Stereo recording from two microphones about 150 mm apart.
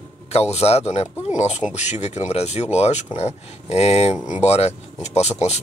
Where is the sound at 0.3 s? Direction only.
45° left (ahead or behind).